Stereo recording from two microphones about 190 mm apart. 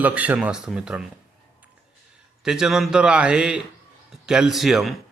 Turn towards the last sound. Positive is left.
turn(degrees=0)  # may be behind; listen again after turning